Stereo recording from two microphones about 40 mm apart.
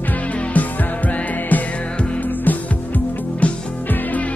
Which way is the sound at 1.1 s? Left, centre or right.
Left.